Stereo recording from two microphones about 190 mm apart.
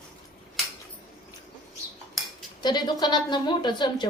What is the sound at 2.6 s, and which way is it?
A woman's voice, 25° left (ahead or behind).